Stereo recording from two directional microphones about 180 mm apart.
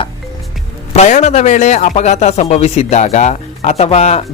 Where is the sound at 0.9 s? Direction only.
40° left (ahead or behind).